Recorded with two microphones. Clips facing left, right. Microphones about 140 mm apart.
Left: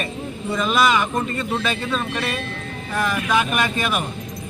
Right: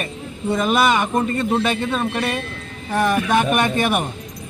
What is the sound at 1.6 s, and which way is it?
A man's voice, 25° right (ahead or behind).